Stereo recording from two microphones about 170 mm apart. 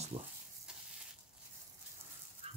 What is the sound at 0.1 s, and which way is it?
Speech, 30° right (ahead or behind).